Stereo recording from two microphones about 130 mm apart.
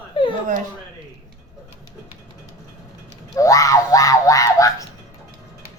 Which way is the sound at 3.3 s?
25° left (ahead or behind).